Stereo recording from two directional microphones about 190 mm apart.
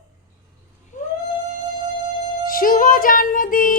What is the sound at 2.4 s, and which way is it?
Music, 45° left (ahead or behind).